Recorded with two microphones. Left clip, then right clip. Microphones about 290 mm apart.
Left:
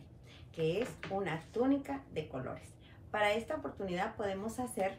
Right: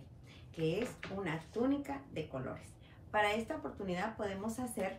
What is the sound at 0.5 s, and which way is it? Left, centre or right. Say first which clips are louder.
A woman's voice: left 2 dB; centre.